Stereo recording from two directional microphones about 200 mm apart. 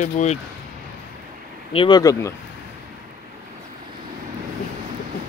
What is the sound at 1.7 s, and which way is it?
Speech, 25° left (ahead or behind).